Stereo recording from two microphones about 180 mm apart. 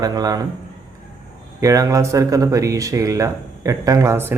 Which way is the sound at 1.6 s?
20° right (ahead or behind).